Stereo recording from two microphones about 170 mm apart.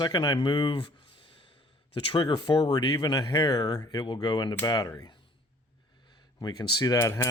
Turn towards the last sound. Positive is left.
turn(degrees=15)  # may be behind; listen again after turning